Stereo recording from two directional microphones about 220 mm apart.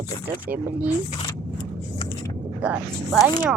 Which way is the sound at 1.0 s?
20° left (ahead or behind).